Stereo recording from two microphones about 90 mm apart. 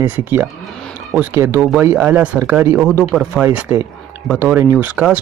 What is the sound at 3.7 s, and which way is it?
Speech, 30° right (ahead or behind).